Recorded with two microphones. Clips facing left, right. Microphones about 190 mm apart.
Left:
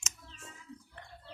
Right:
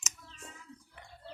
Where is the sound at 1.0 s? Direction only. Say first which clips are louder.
Left 2 dB; 10° right (ahead or behind).